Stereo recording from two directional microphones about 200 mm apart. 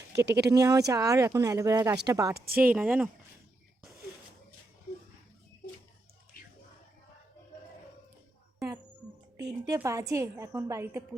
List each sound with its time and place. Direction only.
0.1 s speech: 55° right (ahead or behind)
0.5 s a woman's voice: 15° right (ahead or behind)
2.3 s speech: 50° right (ahead or behind)
2.6 s a woman's voice: 5° right (ahead or behind)
9.4 s a woman's voice: 15° right (ahead or behind)